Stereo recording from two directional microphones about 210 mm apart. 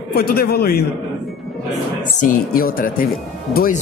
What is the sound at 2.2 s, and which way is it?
Speech, 45° left (ahead or behind).